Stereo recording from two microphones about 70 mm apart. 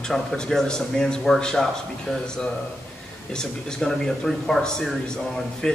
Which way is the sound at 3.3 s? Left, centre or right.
Centre.